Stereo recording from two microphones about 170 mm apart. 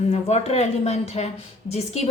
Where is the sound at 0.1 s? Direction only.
40° left (ahead or behind).